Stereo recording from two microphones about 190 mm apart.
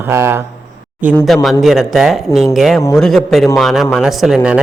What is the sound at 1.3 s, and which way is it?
Speech, centre (ahead or behind).